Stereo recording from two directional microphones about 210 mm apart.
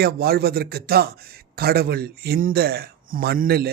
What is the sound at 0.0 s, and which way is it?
A man's voice, 50° right (ahead or behind).